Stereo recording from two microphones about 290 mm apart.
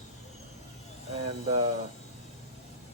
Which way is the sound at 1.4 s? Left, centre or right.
Right.